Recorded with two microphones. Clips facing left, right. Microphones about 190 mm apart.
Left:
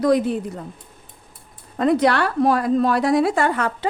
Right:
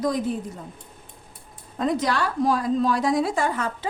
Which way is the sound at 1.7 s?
65° left (ahead or behind).